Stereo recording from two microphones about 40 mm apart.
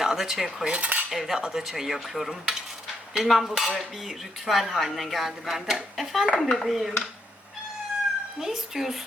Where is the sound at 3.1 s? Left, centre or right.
Centre.